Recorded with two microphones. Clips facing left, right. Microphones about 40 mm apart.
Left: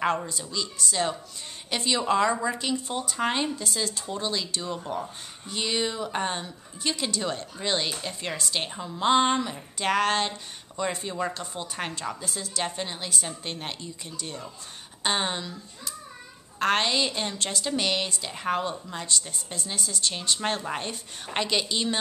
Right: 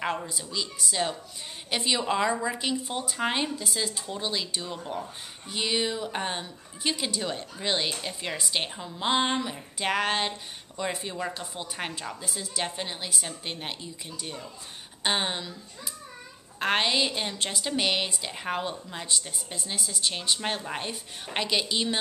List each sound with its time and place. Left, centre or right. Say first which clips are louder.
0.3 s speech: left 1 dB; centre
8.6 s a woman's voice: left 4 dB; centre